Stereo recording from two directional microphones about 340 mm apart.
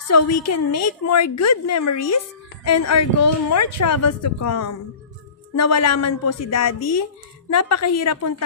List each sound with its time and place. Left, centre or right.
0.1 s a woman's voice: left